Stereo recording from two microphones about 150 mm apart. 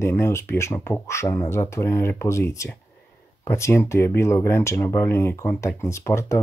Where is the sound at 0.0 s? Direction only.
15° left (ahead or behind).